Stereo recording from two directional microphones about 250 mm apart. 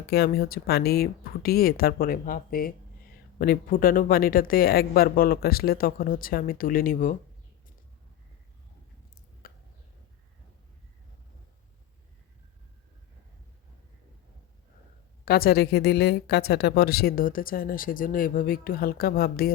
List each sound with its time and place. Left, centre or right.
0.1 s speech: left
9.4 s a sound: left
15.2 s speech: left